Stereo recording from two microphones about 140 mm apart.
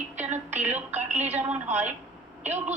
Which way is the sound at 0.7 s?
10° right (ahead or behind).